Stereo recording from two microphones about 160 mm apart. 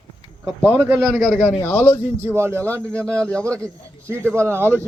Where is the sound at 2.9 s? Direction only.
5° left (ahead or behind).